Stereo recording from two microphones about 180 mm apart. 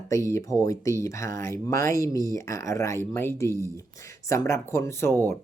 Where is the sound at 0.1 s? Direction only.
15° left (ahead or behind).